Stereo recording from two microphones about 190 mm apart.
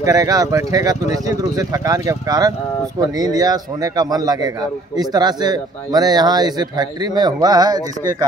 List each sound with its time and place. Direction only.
0.0 s speech: 20° right (ahead or behind)